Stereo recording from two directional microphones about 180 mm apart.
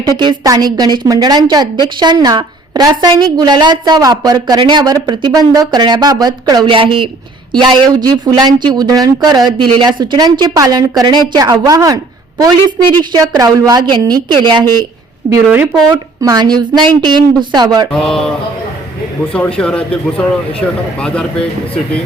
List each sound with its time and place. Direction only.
0.2 s speech: 25° right (ahead or behind)
13.1 s speech: 20° right (ahead or behind)
15.4 s speech: 5° right (ahead or behind)
15.9 s speech: 20° right (ahead or behind)
17.9 s speech: 5° left (ahead or behind)
19.5 s speech: 5° left (ahead or behind)